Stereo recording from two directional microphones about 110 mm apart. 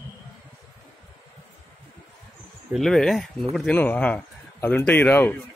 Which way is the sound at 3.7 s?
15° left (ahead or behind).